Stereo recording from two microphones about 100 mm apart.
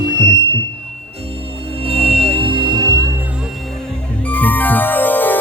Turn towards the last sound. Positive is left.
turn(degrees=20)  # may be behind; listen again after turning